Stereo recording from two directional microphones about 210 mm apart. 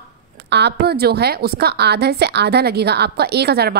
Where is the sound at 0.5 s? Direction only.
55° right (ahead or behind).